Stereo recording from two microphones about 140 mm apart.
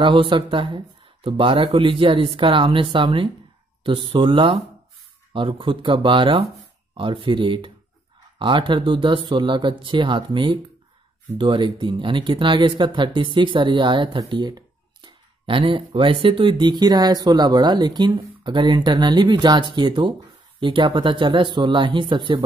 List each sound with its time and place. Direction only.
0.0 s speech: 35° right (ahead or behind)